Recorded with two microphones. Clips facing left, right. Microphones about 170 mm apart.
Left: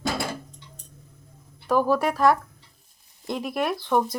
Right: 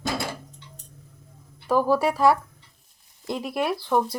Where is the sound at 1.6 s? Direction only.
5° right (ahead or behind).